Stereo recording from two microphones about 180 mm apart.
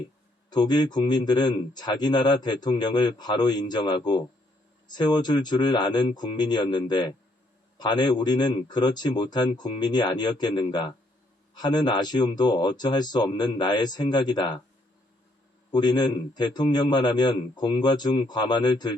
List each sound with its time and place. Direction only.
0.5 s a man's voice: 25° left (ahead or behind)
15.7 s a man's voice: 25° left (ahead or behind)